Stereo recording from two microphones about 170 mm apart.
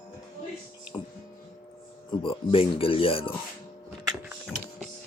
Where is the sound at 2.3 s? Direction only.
30° left (ahead or behind).